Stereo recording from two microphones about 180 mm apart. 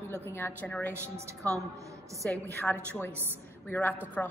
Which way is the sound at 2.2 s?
10° left (ahead or behind).